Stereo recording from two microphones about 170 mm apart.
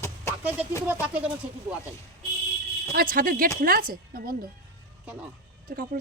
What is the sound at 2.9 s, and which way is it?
Speech, 55° right (ahead or behind).